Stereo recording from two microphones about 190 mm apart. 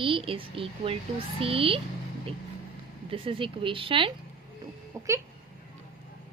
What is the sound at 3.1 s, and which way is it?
A woman's voice, 30° right (ahead or behind).